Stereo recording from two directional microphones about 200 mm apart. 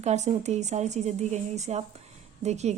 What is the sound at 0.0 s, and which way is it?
A woman's voice, 35° right (ahead or behind).